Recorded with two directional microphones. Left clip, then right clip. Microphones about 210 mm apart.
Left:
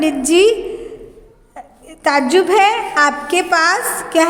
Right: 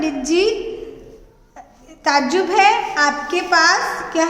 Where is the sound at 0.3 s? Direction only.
40° left (ahead or behind).